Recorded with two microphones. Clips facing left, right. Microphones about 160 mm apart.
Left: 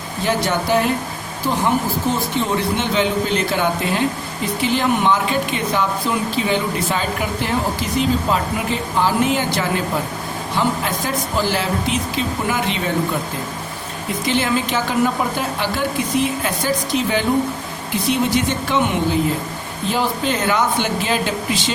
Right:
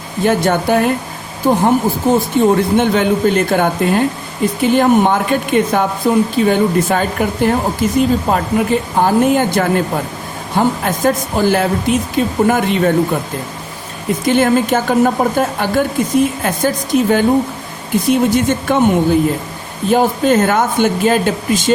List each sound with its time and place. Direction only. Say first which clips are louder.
0.3 s a woman's voice: right 5 dB; 50° right (ahead or behind)
14.3 s a woman's voice: right 8 dB; 50° right (ahead or behind)